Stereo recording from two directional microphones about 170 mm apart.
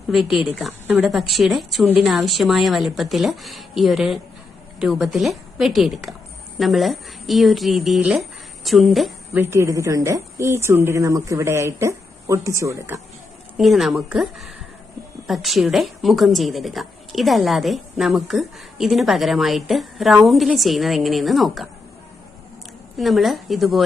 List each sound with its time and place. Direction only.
0.1 s a woman's voice: centre (ahead or behind)
9.3 s a woman's voice: 15° right (ahead or behind)
13.6 s a woman's voice: centre (ahead or behind)
23.0 s a woman's voice: centre (ahead or behind)